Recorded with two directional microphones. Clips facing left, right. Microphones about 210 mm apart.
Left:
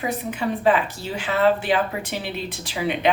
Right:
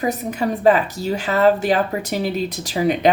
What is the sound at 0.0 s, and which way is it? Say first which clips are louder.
A woman's voice: right 4 dB; 40° right (ahead or behind).